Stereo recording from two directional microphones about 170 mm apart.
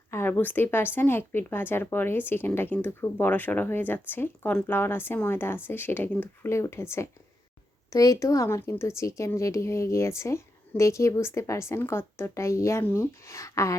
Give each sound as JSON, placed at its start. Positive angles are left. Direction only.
{"t": 0.1, "sound": "speech", "side_deg": 10}
{"t": 7.9, "sound": "speech", "side_deg": 20}